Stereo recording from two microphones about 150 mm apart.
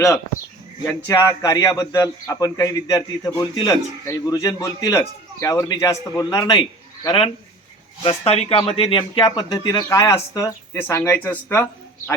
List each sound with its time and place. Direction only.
1.0 s speech: 20° left (ahead or behind)
7.0 s speech: 35° left (ahead or behind); by 12.1 s 15° left (ahead or behind)